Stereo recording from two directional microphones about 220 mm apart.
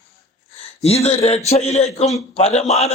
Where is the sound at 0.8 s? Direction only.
30° left (ahead or behind).